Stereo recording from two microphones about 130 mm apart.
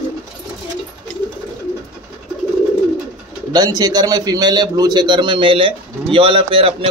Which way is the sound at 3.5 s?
30° right (ahead or behind).